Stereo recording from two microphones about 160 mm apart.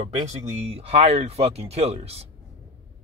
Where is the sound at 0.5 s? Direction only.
40° right (ahead or behind).